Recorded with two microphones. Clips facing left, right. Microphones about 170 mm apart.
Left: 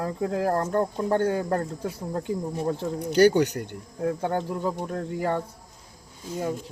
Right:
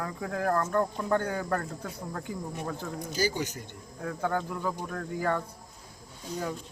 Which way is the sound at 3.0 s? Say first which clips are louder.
Left 12 dB; 70° left (ahead or behind).